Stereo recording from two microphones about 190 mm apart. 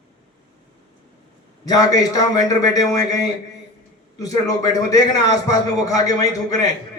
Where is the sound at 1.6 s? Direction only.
20° left (ahead or behind).